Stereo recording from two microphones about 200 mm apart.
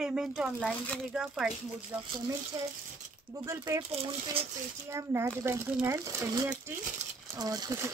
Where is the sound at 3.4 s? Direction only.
15° right (ahead or behind).